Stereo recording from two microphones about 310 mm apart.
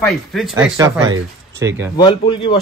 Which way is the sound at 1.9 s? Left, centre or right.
Centre.